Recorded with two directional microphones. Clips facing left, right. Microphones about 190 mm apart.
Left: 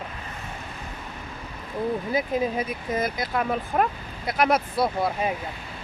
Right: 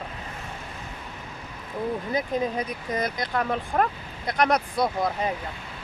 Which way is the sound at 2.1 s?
5° left (ahead or behind).